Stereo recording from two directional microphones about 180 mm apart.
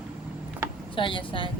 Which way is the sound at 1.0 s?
30° left (ahead or behind).